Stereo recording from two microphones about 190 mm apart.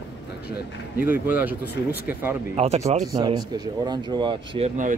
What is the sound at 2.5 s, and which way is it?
Speech, 35° right (ahead or behind).